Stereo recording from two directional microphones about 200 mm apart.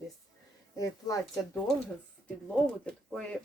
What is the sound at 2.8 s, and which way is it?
Speech, 5° left (ahead or behind).